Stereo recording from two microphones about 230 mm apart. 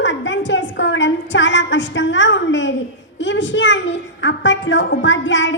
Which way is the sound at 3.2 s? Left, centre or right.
Left.